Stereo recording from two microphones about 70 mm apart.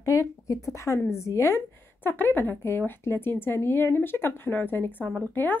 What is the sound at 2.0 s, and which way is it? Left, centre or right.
A woman's voice, left.